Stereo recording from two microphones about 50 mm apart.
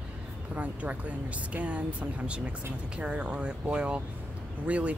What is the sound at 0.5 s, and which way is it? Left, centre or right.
Speech, right.